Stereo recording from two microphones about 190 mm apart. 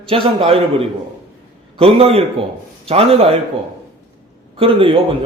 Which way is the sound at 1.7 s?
30° right (ahead or behind).